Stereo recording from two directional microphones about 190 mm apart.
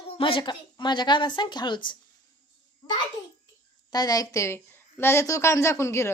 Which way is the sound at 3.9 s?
20° left (ahead or behind).